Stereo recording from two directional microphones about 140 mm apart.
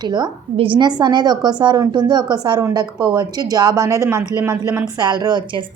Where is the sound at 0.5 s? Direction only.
40° right (ahead or behind); by 4.9 s 15° right (ahead or behind).